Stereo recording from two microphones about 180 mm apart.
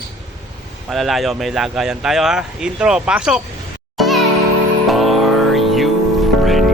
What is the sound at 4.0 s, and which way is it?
Music, centre (ahead or behind).